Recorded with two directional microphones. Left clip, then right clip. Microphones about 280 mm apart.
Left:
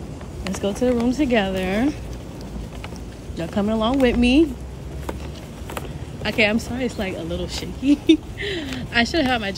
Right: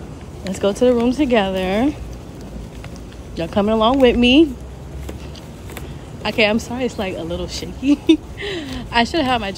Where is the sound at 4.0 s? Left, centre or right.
Centre.